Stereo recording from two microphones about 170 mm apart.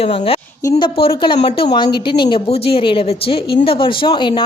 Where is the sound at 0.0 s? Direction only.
35° left (ahead or behind).